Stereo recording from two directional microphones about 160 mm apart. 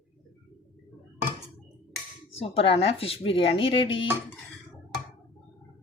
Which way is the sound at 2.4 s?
40° left (ahead or behind).